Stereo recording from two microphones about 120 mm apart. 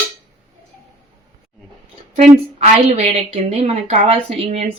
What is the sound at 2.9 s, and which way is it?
Speech, 65° right (ahead or behind).